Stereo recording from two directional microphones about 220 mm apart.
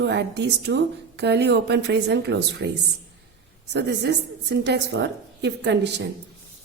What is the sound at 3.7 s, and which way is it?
A woman's voice, 50° right (ahead or behind).